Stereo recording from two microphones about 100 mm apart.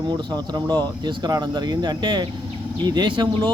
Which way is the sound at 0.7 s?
45° right (ahead or behind).